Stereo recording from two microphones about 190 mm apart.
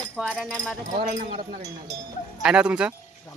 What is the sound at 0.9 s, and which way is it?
Speech, 40° right (ahead or behind).